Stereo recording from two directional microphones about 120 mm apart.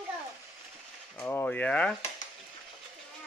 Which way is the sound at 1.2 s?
15° left (ahead or behind).